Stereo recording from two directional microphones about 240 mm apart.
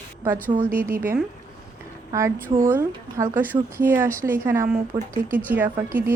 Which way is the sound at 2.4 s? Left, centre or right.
Right.